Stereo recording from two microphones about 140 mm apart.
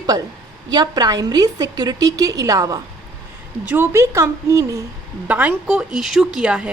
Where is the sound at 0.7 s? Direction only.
30° right (ahead or behind).